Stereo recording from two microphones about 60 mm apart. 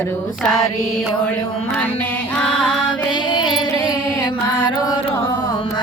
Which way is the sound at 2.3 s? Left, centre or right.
Centre.